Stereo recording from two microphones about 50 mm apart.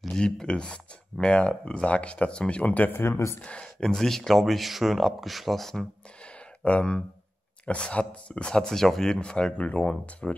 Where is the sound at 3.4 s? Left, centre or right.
Left.